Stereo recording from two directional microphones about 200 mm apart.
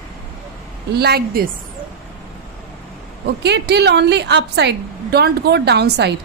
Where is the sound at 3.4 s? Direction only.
55° right (ahead or behind).